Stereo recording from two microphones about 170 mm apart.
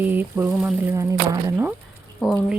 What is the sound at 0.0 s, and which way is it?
Speech, 10° right (ahead or behind).